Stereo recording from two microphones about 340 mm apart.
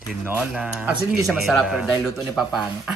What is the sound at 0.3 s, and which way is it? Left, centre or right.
Speech, centre.